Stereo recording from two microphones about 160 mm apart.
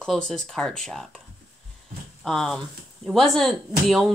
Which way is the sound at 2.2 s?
5° left (ahead or behind).